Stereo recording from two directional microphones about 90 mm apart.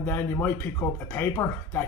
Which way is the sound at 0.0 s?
25° left (ahead or behind).